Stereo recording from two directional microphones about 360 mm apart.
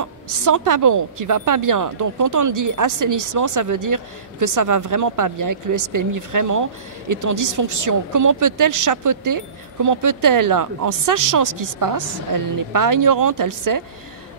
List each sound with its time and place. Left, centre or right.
0.0 s a woman's voice: right